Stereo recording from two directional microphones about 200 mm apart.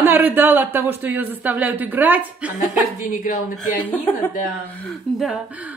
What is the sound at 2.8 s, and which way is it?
Speech, 40° left (ahead or behind).